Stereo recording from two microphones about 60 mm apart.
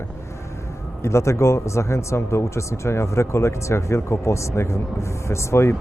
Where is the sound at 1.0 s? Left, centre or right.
Left.